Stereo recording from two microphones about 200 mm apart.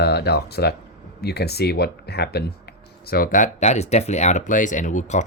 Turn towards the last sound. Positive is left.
turn(degrees=35)  # may be behind; listen again after turning